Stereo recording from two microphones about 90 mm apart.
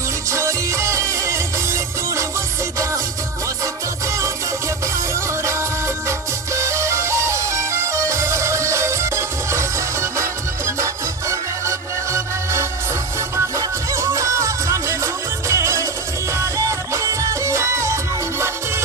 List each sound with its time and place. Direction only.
0.3 s music: 30° right (ahead or behind)
6.0 s music: 35° right (ahead or behind)
10.8 s music: 35° right (ahead or behind)